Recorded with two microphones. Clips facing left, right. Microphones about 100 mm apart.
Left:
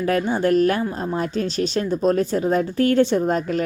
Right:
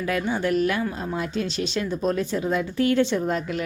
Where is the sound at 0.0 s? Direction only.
40° left (ahead or behind).